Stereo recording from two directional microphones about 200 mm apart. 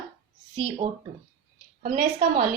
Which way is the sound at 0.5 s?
30° right (ahead or behind).